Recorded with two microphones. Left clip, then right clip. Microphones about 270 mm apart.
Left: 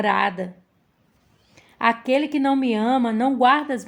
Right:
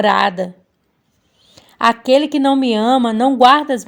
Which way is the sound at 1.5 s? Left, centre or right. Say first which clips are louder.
Right 6 dB; right.